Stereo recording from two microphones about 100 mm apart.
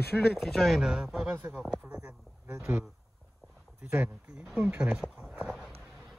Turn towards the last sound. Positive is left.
turn(degrees=-10)  # may be behind; listen again after turning